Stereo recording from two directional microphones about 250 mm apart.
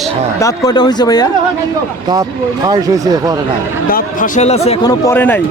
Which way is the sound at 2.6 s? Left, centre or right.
Centre.